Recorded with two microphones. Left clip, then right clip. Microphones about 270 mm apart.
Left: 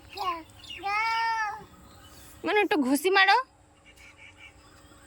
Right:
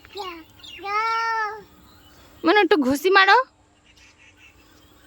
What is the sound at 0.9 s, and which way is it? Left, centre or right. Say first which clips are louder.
Child singing: right 4 dB; centre.